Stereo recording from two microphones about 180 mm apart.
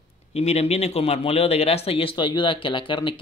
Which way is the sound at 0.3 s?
35° left (ahead or behind).